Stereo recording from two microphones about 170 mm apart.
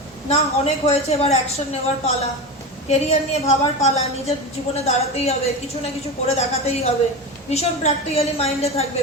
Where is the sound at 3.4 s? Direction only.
40° left (ahead or behind).